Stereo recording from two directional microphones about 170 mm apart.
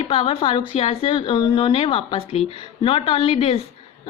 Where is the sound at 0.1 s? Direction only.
35° left (ahead or behind).